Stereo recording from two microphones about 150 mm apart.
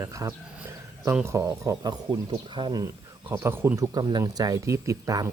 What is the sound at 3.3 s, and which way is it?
Speech, 15° right (ahead or behind).